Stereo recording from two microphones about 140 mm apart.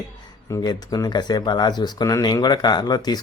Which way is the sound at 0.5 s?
30° left (ahead or behind).